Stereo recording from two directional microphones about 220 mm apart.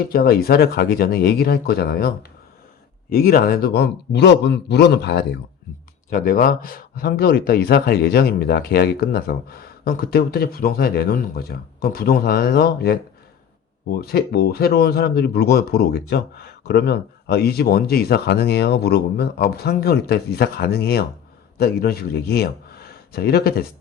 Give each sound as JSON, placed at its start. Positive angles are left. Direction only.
{"t": 0.1, "sound": "speech", "side_deg": 45}
{"t": 6.1, "sound": "speech", "side_deg": 40}
{"t": 14.0, "sound": "a man's voice", "side_deg": 45}